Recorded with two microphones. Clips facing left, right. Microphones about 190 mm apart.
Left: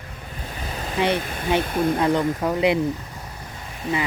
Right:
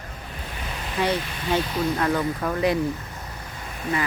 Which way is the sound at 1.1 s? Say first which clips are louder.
Left 2 dB; 55° left (ahead or behind).